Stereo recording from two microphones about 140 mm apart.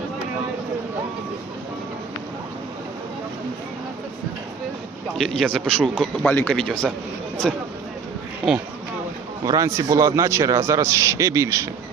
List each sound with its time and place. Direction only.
5.1 s a man's voice: centre (ahead or behind)
9.4 s a man's voice: 25° right (ahead or behind)